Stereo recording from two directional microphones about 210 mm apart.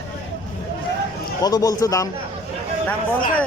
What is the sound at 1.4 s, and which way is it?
Speech, 15° left (ahead or behind).